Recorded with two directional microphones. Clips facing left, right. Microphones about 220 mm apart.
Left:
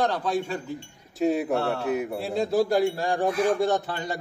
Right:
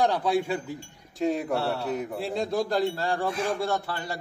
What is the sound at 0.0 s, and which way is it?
Speech, 10° right (ahead or behind).